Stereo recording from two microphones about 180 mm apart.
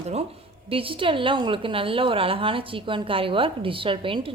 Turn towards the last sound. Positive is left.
turn(degrees=-30)  # may be behind; listen again after turning